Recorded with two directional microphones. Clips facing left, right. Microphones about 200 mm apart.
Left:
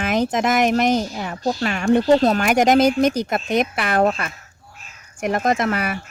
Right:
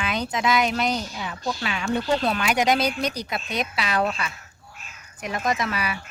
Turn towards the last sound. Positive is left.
turn(degrees=50)  # may be behind; listen again after turning